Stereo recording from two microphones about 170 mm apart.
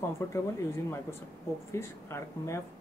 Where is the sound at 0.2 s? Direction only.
15° left (ahead or behind).